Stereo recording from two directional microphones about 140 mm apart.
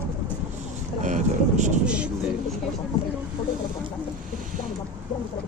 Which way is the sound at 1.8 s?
10° right (ahead or behind).